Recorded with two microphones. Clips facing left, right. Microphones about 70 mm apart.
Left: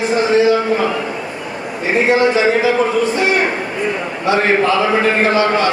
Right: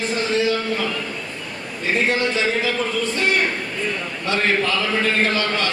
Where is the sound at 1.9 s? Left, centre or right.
Centre.